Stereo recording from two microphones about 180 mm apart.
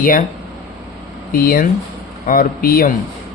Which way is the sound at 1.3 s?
55° left (ahead or behind).